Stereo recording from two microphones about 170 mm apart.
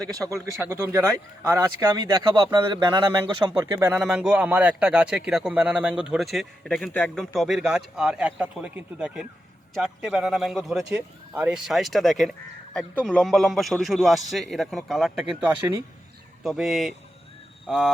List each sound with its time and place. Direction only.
0.2 s a man's voice: centre (ahead or behind)
0.6 s speech: 15° right (ahead or behind)
3.9 s a man's voice: 5° right (ahead or behind)